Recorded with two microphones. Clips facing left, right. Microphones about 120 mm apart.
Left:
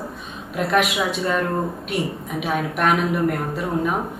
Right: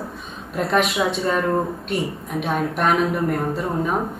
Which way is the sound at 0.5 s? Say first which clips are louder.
Even; 5° left (ahead or behind).